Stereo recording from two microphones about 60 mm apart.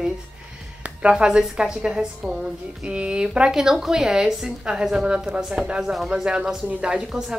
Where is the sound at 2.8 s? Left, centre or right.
Centre.